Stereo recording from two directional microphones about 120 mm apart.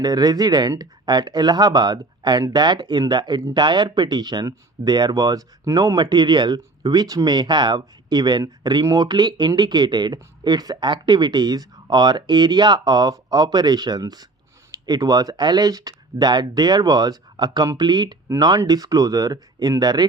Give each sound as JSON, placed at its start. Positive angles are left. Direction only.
{"t": 0.0, "sound": "speech", "side_deg": -35}